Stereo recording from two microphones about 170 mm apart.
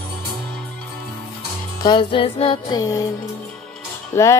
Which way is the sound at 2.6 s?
20° left (ahead or behind).